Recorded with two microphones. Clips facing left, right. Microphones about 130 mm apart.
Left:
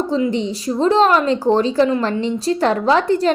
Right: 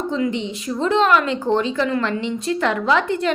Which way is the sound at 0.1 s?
35° left (ahead or behind).